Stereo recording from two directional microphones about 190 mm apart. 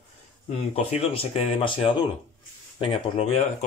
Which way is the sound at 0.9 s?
30° left (ahead or behind).